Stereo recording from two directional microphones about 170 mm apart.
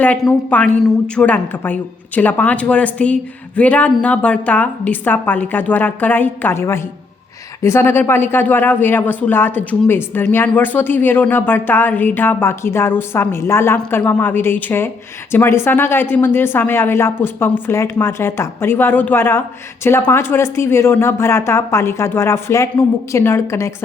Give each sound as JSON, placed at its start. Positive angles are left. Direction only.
{"t": 0.0, "sound": "a man's voice", "side_deg": 10}